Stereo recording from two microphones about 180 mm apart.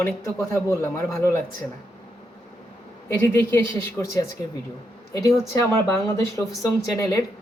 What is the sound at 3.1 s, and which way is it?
A man's voice, 15° left (ahead or behind).